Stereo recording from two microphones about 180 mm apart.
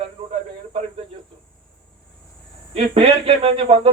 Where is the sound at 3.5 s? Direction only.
30° right (ahead or behind).